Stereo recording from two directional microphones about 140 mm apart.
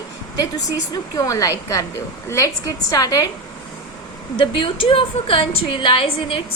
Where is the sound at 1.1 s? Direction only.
25° left (ahead or behind).